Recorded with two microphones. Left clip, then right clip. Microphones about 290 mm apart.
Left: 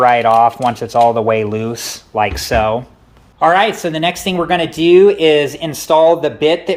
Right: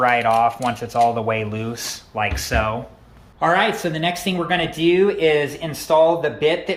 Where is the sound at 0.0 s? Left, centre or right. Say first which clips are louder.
Left 7 dB; left.